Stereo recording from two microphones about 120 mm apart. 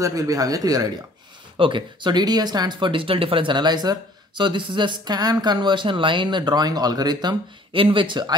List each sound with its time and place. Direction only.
0.0 s speech: 25° right (ahead or behind)
1.6 s speech: 40° right (ahead or behind)